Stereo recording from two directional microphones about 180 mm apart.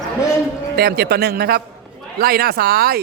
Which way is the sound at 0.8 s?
60° right (ahead or behind).